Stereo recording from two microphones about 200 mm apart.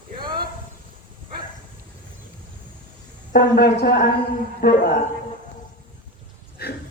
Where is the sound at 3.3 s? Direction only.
50° left (ahead or behind).